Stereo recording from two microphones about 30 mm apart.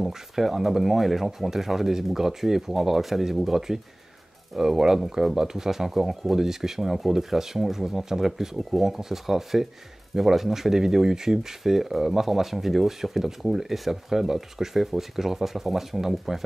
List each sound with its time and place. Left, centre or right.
0.1 s speech: centre
4.6 s speech: centre